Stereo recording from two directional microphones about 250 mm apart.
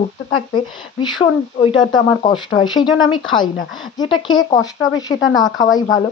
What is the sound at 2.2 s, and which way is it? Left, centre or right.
Speech, centre.